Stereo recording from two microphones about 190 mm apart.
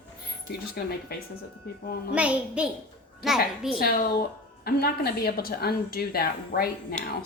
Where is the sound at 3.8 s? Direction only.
55° left (ahead or behind).